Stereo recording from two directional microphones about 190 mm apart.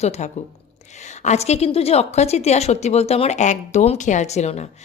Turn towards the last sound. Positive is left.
turn(degrees=35)  # may be behind; listen again after turning